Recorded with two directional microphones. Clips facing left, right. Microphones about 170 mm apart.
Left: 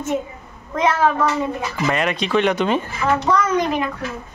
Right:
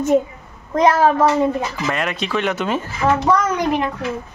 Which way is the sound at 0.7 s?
35° right (ahead or behind).